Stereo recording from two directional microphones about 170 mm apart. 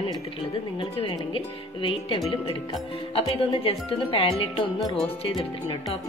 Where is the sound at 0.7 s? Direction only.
30° left (ahead or behind).